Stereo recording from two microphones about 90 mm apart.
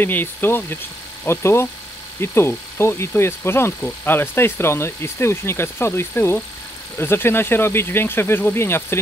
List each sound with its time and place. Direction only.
0.0 s speech: 20° left (ahead or behind)